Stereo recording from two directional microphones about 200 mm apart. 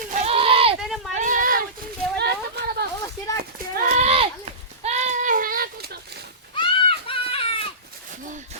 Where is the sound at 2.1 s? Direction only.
55° right (ahead or behind).